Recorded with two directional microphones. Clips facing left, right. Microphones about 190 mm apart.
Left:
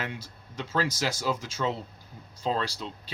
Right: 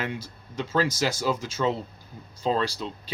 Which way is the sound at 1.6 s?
35° right (ahead or behind).